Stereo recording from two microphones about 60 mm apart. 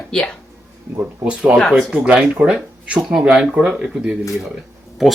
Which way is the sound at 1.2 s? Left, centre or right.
Centre.